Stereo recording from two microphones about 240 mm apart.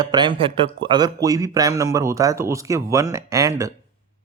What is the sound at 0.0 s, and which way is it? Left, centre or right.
Speech, centre.